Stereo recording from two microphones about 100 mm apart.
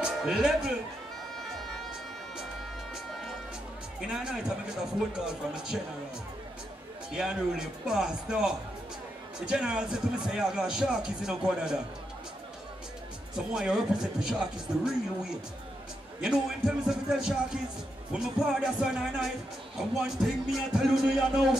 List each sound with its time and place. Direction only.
0.0 s speech: 5° right (ahead or behind)
2.9 s music: centre (ahead or behind)
4.1 s a man's voice: 5° right (ahead or behind)
7.1 s a man's voice: 5° right (ahead or behind)
13.5 s a man's voice: 10° right (ahead or behind)
16.2 s speech: 5° right (ahead or behind)